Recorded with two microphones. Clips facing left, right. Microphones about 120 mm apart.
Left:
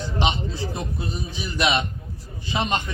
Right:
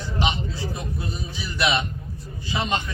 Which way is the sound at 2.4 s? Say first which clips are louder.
Left 1 dB; 20° left (ahead or behind).